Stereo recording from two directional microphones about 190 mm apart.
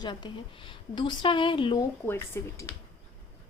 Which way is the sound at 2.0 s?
15° left (ahead or behind).